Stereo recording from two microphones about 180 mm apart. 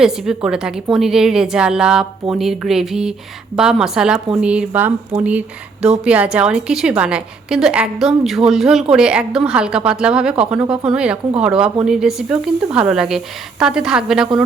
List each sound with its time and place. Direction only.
0.0 s a woman's voice: 5° right (ahead or behind)